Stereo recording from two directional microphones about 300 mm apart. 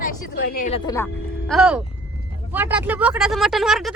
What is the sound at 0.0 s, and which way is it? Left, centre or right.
Speech, left.